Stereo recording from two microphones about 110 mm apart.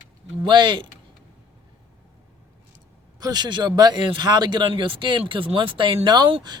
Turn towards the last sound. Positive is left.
turn(degrees=-40)  # may be behind; listen again after turning